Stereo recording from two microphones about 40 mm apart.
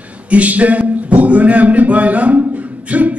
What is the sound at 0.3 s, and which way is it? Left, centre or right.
Music, right.